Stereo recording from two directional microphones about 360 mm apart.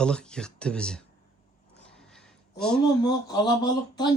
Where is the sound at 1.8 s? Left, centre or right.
Centre.